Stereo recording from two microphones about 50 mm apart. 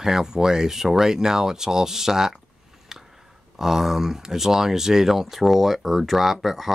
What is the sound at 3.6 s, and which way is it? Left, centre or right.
Speech, centre.